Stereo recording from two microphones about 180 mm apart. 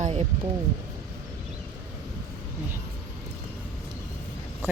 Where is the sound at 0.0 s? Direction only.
40° right (ahead or behind).